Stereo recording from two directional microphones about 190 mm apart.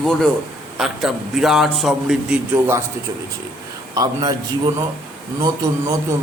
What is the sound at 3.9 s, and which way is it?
Speech, 20° right (ahead or behind).